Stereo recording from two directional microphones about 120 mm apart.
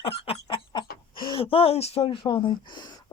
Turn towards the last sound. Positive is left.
turn(degrees=40)  # may be behind; listen again after turning